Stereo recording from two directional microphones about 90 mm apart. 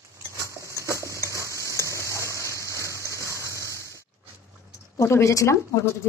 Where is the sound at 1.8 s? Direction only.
35° right (ahead or behind).